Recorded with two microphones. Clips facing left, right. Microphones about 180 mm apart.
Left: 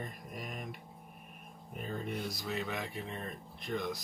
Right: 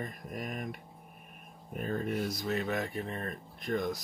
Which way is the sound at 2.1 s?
Centre (ahead or behind).